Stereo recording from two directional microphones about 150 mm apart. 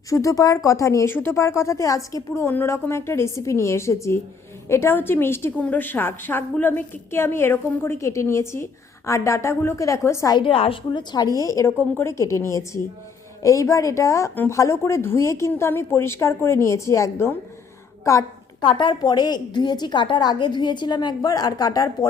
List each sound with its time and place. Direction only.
0.1 s a woman's voice: 20° left (ahead or behind)
18.6 s a woman's voice: 35° left (ahead or behind)